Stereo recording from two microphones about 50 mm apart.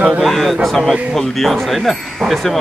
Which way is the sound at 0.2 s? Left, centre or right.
Centre.